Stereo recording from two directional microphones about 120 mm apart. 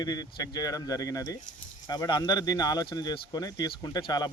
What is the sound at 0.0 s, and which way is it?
Speech, 35° left (ahead or behind).